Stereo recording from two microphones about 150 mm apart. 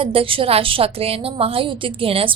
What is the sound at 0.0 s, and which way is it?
A woman's voice, 40° right (ahead or behind).